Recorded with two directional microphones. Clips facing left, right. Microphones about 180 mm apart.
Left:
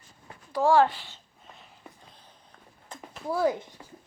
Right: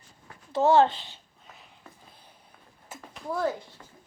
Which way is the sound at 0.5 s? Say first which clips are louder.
Right 1 dB; 25° right (ahead or behind).